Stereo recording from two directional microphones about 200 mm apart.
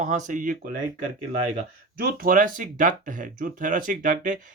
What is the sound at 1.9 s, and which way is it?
Speech, 45° right (ahead or behind).